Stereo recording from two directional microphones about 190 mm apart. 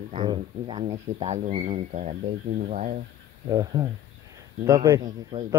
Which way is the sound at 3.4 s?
20° right (ahead or behind).